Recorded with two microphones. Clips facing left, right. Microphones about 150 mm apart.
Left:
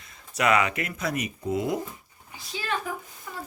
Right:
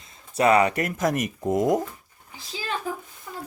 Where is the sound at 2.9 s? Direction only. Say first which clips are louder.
Right 3 dB; 30° right (ahead or behind).